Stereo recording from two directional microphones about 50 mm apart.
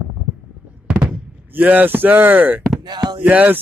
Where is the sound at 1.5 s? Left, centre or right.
Right.